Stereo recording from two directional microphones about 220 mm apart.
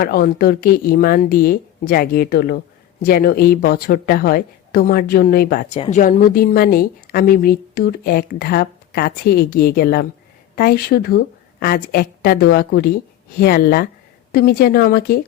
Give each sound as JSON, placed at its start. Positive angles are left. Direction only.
{"t": 0.0, "sound": "a woman's voice", "side_deg": 45}
{"t": 5.7, "sound": "a woman's voice", "side_deg": 30}